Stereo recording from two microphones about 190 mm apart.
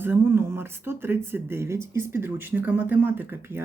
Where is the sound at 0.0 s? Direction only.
10° right (ahead or behind).